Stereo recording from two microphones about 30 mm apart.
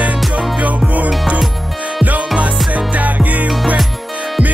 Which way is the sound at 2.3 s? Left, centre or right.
Right.